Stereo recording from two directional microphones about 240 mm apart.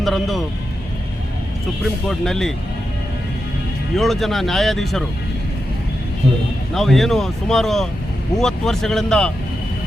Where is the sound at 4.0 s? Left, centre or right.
Centre.